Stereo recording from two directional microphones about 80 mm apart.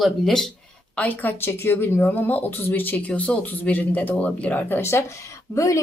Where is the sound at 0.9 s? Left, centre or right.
Centre.